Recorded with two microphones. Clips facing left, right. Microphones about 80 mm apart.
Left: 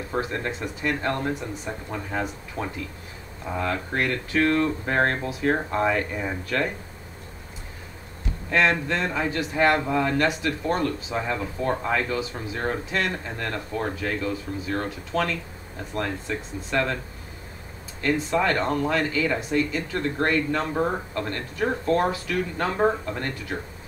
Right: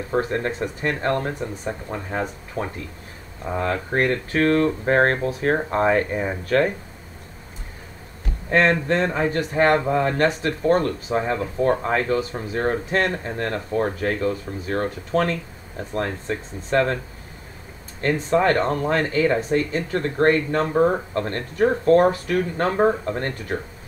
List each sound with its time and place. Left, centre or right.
0.2 s a man's voice: right
3.5 s a man's voice: right
8.5 s a man's voice: right
18.0 s a man's voice: right
20.7 s speech: right
21.1 s a man's voice: right